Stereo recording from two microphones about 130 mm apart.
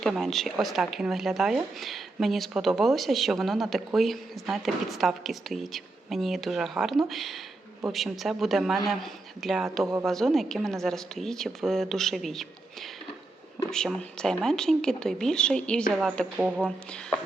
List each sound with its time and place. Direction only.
0.0 s speech: centre (ahead or behind)
9.8 s a woman's voice: 20° right (ahead or behind)
10.1 s speech: centre (ahead or behind)
13.7 s speech: 5° left (ahead or behind)
16.4 s a woman's voice: 10° right (ahead or behind)